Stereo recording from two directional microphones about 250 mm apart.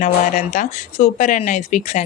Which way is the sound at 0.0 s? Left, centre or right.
Left.